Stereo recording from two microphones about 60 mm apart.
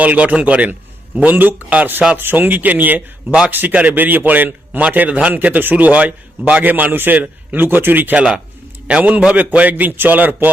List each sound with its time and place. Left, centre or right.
0.0 s a man's voice: right
8.9 s a man's voice: right